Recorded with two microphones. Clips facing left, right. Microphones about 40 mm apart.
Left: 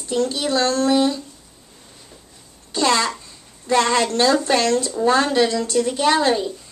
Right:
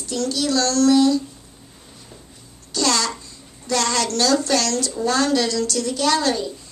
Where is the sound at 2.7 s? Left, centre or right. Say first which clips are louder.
Left 3 dB; left.